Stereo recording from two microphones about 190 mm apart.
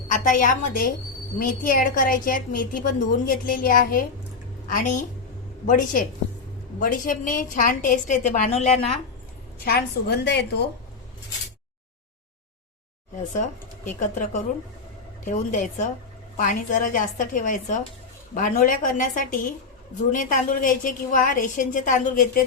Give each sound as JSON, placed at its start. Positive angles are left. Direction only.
{"t": 0.1, "sound": "a woman's voice", "side_deg": 40}
{"t": 9.6, "sound": "a woman's voice", "side_deg": 55}
{"t": 14.0, "sound": "a woman's voice", "side_deg": 40}